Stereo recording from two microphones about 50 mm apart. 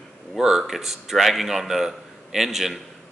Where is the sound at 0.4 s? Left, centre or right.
Centre.